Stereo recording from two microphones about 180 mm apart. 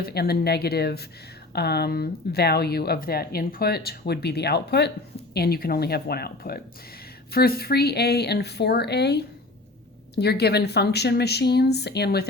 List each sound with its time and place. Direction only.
0.0 s speech: 60° left (ahead or behind)